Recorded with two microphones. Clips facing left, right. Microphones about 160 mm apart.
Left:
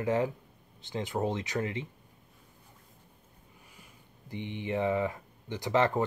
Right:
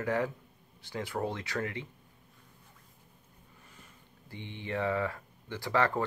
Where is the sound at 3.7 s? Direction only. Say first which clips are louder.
Left 1 dB; 15° left (ahead or behind).